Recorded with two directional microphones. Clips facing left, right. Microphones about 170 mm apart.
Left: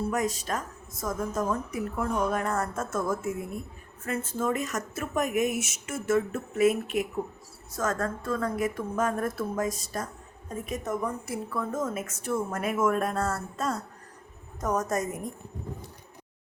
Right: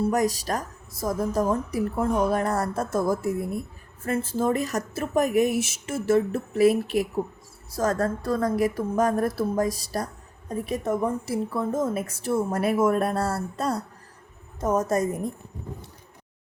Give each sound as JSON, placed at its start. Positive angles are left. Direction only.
{"t": 0.0, "sound": "a woman's voice", "side_deg": -35}